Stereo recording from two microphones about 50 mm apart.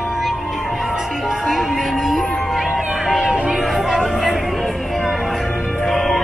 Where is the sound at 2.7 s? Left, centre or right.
Right.